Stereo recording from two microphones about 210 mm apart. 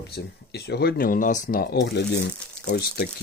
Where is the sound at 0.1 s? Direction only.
50° left (ahead or behind).